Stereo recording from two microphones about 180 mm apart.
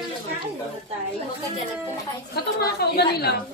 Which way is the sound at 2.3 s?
65° left (ahead or behind).